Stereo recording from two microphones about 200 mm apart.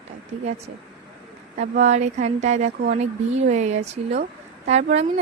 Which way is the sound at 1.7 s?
35° right (ahead or behind).